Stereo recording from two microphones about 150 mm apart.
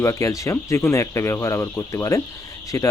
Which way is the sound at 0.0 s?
20° left (ahead or behind).